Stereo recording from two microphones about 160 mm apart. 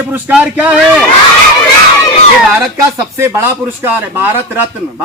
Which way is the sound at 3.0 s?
15° right (ahead or behind).